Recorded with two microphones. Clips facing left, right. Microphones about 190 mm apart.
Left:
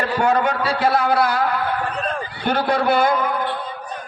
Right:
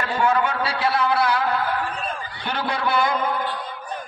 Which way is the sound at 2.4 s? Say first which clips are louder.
Left 7 dB; 50° left (ahead or behind).